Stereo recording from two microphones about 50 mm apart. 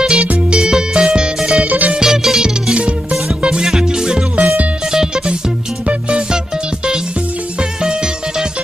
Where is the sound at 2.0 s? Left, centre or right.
Centre.